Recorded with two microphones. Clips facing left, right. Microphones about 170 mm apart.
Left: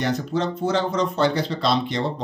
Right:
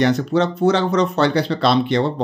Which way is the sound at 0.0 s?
70° right (ahead or behind).